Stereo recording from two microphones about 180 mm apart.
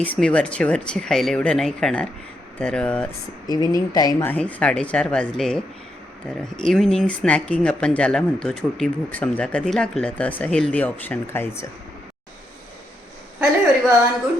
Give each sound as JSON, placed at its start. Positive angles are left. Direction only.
{"t": 0.0, "sound": "speech", "side_deg": 5}
{"t": 3.4, "sound": "speech", "side_deg": 20}
{"t": 4.3, "sound": "speech", "side_deg": 5}